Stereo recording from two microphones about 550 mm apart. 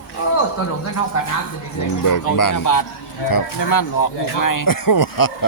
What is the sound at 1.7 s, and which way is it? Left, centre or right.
Speech, left.